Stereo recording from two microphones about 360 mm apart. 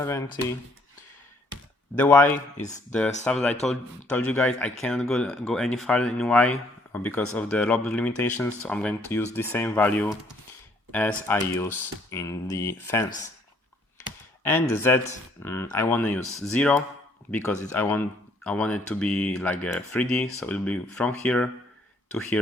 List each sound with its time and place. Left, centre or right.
2.0 s speech: centre
14.4 s speech: centre